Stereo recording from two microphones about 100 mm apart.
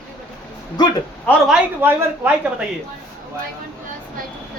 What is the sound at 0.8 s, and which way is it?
Speech, 45° left (ahead or behind).